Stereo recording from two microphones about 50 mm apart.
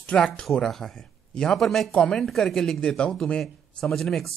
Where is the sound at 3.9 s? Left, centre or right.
Centre.